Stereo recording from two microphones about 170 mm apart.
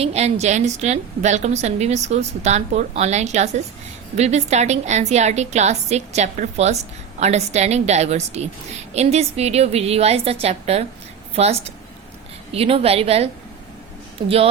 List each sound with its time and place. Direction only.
0.0 s a woman's voice: 40° right (ahead or behind)
14.3 s a woman's voice: 35° right (ahead or behind)